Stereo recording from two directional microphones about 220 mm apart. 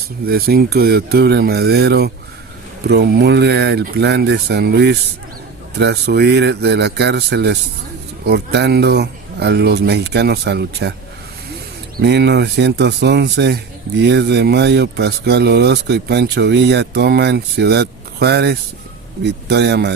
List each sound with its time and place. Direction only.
0.3 s speech: 45° right (ahead or behind)
11.9 s speech: 50° right (ahead or behind)